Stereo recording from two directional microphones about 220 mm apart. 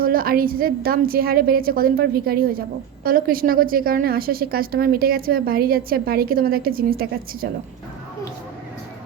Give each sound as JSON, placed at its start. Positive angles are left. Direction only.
{"t": 0.0, "sound": "a woman's voice", "side_deg": -40}